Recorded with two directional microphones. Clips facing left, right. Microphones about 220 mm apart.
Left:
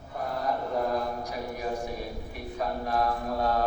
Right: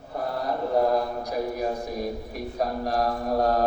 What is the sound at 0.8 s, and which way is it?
Speech, 35° right (ahead or behind).